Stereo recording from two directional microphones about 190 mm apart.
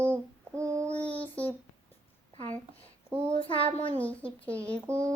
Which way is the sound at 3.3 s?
30° left (ahead or behind).